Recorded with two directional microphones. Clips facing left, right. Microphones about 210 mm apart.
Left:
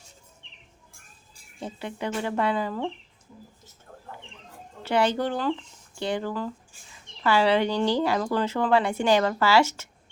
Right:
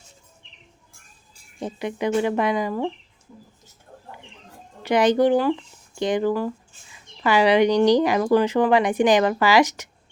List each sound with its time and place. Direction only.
1.6 s speech: 15° right (ahead or behind)
4.8 s speech: 15° right (ahead or behind)